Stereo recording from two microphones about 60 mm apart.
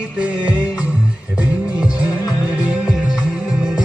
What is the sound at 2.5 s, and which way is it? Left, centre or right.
Music, centre.